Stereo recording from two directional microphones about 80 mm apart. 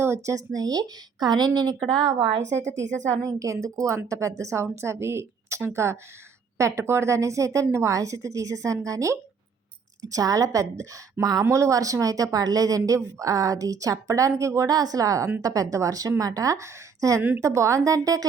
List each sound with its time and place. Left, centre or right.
0.0 s speech: right
0.3 s speech: right
2.1 s a woman's voice: right
3.2 s a woman's voice: right